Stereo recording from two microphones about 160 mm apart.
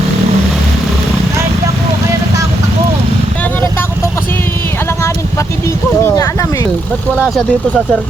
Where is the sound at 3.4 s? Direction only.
15° left (ahead or behind).